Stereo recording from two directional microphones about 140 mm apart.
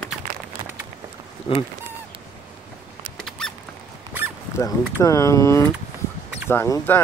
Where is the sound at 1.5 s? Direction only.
40° left (ahead or behind).